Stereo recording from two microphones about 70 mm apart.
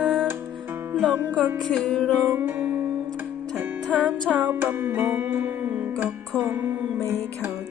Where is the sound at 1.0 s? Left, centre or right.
Centre.